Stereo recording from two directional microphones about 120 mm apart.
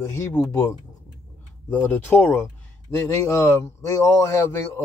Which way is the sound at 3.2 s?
25° left (ahead or behind).